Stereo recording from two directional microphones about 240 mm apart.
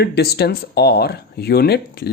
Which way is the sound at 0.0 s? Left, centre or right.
Left.